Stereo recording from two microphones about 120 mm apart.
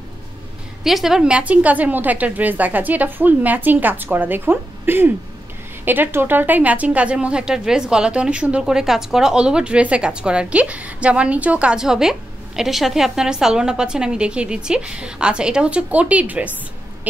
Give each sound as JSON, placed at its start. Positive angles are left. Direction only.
{"t": 0.8, "sound": "a woman's voice", "side_deg": 0}